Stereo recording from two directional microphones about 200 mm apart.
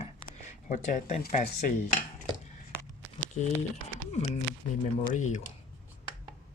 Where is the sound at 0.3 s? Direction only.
40° left (ahead or behind).